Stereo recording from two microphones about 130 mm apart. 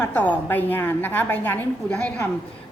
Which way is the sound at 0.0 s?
10° left (ahead or behind).